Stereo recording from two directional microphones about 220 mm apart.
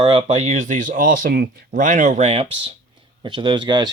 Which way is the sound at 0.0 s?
25° right (ahead or behind).